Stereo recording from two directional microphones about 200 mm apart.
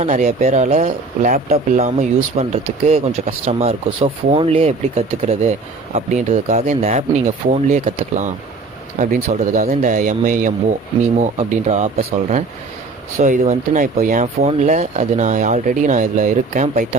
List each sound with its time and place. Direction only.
0.0 s speech: 35° right (ahead or behind)